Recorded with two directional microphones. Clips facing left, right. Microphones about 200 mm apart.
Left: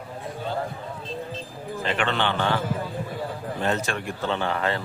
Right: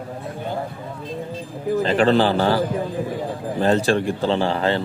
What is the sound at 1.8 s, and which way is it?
Speech, 35° right (ahead or behind).